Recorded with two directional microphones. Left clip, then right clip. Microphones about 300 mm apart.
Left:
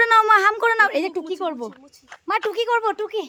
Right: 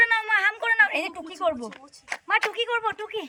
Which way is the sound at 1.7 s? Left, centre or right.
Right.